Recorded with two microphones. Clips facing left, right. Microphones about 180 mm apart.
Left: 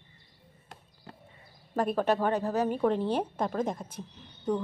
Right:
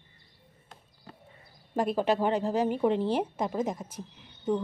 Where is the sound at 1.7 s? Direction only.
10° right (ahead or behind).